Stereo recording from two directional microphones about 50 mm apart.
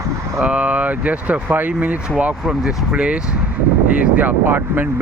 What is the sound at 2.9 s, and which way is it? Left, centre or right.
Speech, right.